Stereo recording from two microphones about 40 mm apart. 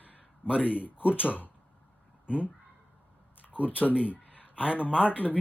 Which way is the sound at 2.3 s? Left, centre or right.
Left.